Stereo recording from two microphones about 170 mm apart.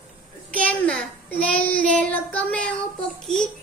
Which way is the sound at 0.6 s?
5° left (ahead or behind).